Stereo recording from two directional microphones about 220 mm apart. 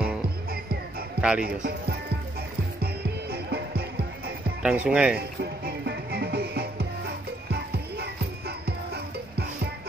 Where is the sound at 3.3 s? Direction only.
45° right (ahead or behind).